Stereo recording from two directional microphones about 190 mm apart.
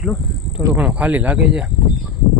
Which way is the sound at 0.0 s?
Centre (ahead or behind).